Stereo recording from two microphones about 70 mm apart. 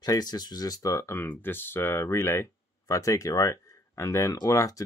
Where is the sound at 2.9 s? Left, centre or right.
Left.